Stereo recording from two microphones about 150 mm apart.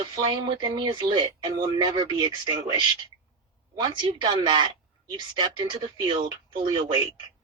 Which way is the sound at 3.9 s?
30° right (ahead or behind).